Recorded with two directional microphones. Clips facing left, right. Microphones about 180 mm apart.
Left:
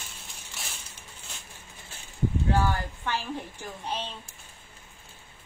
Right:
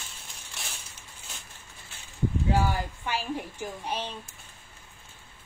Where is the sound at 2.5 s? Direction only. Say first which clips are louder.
Right 1 dB; 10° right (ahead or behind).